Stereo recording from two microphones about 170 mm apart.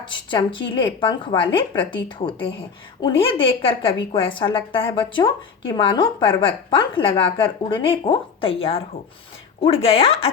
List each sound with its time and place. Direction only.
0.1 s a woman's voice: 30° left (ahead or behind)